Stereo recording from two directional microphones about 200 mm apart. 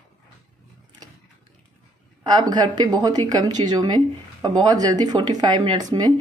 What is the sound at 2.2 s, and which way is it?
Speech, 20° right (ahead or behind).